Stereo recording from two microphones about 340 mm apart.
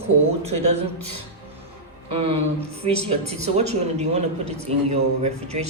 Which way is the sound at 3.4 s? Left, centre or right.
Centre.